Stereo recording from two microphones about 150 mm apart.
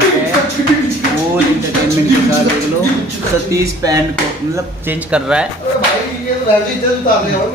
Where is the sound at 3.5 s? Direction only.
25° right (ahead or behind).